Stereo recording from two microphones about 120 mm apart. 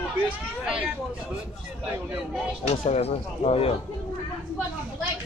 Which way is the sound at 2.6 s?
60° left (ahead or behind).